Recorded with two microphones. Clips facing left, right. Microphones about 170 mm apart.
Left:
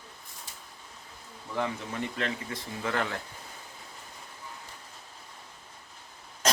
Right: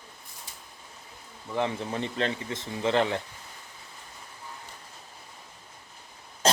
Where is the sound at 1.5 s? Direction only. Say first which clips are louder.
Right 3 dB; 25° right (ahead or behind).